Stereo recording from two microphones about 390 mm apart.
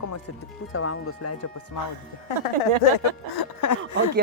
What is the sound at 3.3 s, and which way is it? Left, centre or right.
Speech, left.